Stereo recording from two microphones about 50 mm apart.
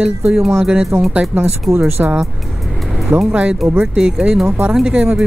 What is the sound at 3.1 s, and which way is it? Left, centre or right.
Speech, centre.